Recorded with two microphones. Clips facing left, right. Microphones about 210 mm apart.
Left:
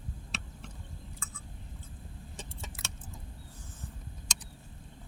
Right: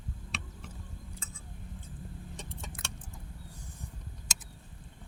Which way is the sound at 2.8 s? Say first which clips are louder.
Right 1 dB; 5° left (ahead or behind).